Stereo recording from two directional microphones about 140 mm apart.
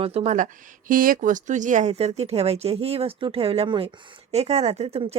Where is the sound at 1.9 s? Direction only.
50° right (ahead or behind).